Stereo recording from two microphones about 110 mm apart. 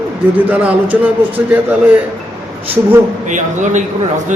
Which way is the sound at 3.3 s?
90° right.